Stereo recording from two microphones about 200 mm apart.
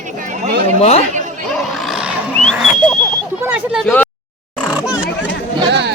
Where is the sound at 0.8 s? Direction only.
30° left (ahead or behind).